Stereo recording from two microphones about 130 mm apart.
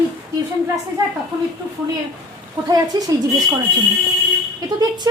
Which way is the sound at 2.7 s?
30° right (ahead or behind).